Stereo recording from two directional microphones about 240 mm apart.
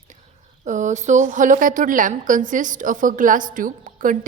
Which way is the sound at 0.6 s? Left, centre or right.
Right.